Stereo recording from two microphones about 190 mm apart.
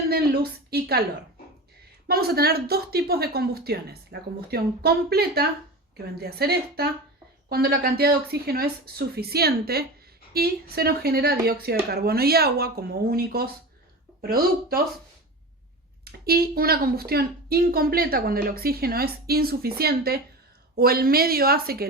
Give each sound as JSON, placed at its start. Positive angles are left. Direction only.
{"t": 0.7, "sound": "a woman's voice", "side_deg": -55}
{"t": 2.0, "sound": "a woman's voice", "side_deg": -55}
{"t": 16.0, "sound": "a woman's voice", "side_deg": -55}